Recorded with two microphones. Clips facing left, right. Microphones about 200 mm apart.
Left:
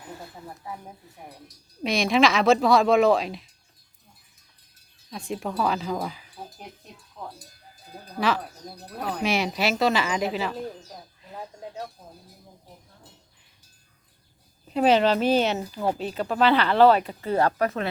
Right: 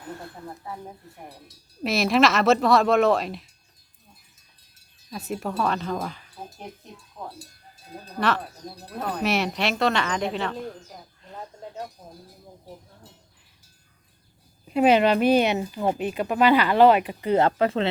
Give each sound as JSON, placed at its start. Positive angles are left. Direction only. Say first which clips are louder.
{"t": 0.2, "sound": "speech", "louder": "right 2 dB", "side_deg": 5}
{"t": 5.1, "sound": "speech", "louder": "right 1 dB", "side_deg": -5}
{"t": 7.2, "sound": "speech", "louder": "right 1 dB", "side_deg": -15}
{"t": 8.2, "sound": "speech", "louder": "even", "side_deg": 0}
{"t": 14.7, "sound": "speech", "louder": "right 1 dB", "side_deg": -10}